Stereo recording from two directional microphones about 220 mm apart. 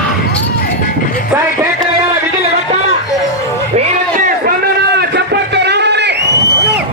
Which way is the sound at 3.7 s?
30° right (ahead or behind).